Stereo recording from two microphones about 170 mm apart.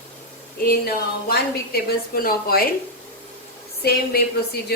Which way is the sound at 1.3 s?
60° left (ahead or behind).